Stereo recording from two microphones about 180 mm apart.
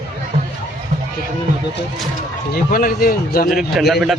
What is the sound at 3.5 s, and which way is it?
Speech, centre (ahead or behind).